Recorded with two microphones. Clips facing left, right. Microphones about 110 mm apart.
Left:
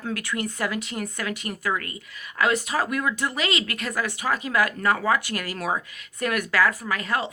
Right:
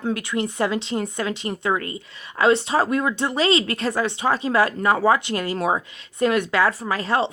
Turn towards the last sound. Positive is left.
turn(degrees=-30)  # may be behind; listen again after turning